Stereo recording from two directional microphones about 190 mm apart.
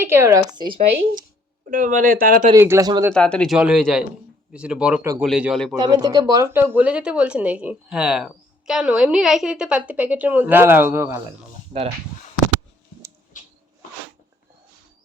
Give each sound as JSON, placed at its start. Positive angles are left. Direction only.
{"t": 0.0, "sound": "speech", "side_deg": -15}
{"t": 1.7, "sound": "speech", "side_deg": -45}
{"t": 2.6, "sound": "speech", "side_deg": -15}
{"t": 3.2, "sound": "speech", "side_deg": 5}
{"t": 5.7, "sound": "speech", "side_deg": -20}